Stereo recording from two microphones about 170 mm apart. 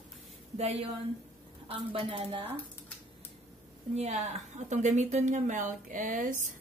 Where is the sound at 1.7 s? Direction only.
30° right (ahead or behind).